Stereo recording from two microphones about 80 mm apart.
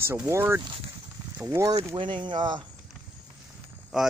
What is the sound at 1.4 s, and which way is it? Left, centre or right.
Speech, right.